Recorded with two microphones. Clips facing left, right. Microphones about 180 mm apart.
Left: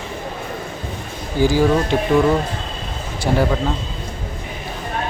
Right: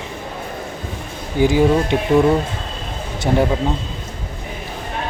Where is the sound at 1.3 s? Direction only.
20° right (ahead or behind).